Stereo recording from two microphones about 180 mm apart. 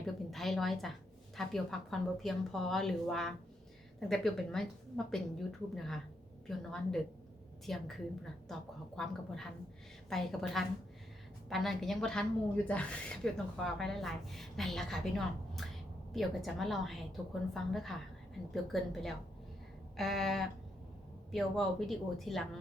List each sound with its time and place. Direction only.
0.0 s speech: centre (ahead or behind)